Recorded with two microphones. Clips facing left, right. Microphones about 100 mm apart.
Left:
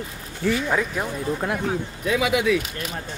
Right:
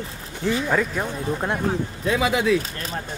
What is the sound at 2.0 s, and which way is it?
Speech, 35° right (ahead or behind).